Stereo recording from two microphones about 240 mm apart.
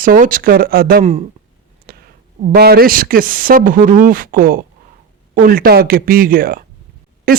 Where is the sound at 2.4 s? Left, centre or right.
Right.